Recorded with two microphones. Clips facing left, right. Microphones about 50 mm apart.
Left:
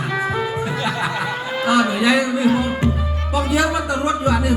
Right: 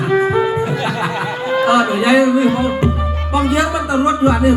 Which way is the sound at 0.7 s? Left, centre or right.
Right.